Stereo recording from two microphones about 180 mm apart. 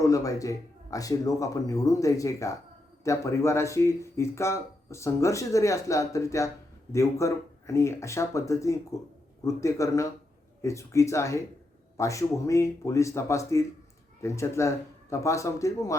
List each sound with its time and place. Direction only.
0.0 s speech: 20° left (ahead or behind)